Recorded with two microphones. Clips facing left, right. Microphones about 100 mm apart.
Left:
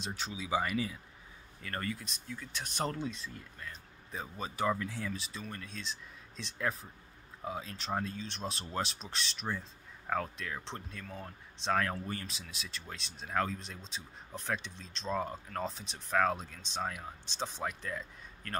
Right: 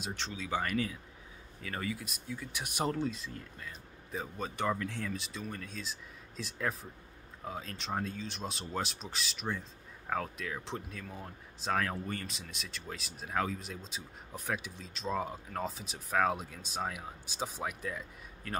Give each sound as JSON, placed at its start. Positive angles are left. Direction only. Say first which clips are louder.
{"t": 0.1, "sound": "speech", "louder": "left 2 dB", "side_deg": 10}